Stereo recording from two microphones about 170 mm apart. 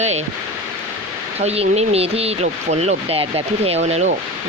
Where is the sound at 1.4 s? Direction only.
40° right (ahead or behind).